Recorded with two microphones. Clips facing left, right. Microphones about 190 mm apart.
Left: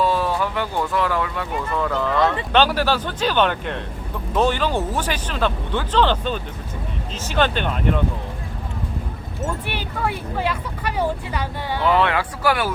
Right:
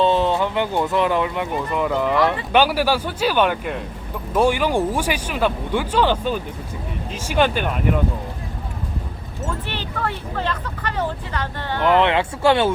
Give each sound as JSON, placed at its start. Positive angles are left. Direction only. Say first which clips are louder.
{"t": 0.0, "sound": "speech", "louder": "right 3 dB", "side_deg": -25}
{"t": 9.5, "sound": "speech", "louder": "right 2 dB", "side_deg": 10}
{"t": 11.8, "sound": "speech", "louder": "right 2 dB", "side_deg": -20}